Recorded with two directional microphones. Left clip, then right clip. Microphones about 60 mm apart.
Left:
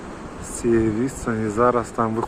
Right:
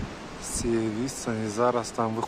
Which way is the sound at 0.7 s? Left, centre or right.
Right.